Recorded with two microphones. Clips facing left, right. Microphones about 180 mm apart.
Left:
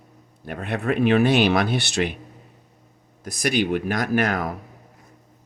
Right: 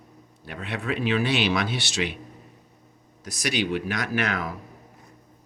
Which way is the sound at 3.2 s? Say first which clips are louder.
Left 5 dB; 50° left (ahead or behind).